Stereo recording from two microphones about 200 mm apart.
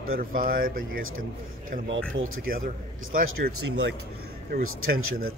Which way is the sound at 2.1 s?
90° right.